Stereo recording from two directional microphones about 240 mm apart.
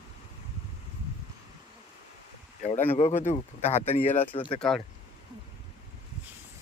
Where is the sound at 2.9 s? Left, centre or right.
Left.